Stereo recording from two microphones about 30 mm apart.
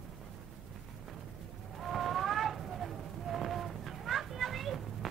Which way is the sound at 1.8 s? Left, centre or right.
Centre.